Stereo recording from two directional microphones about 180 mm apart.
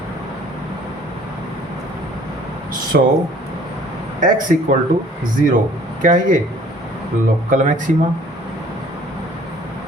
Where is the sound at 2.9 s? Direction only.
55° right (ahead or behind).